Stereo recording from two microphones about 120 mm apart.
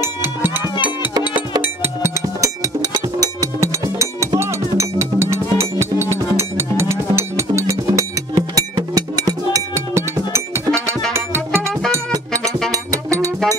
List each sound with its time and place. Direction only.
0.0 s music: 15° right (ahead or behind)